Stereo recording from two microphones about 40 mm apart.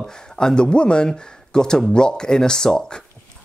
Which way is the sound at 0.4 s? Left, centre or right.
Centre.